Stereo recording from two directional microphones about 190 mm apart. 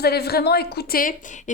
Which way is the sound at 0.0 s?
55° left (ahead or behind).